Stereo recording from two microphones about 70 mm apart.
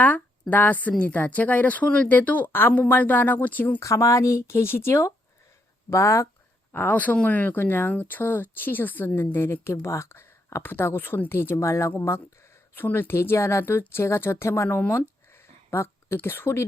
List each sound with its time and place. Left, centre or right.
0.5 s a woman's voice: left
3.8 s speech: left
6.7 s a woman's voice: left
14.7 s a woman's voice: left
15.3 s a sound: left
16.1 s speech: left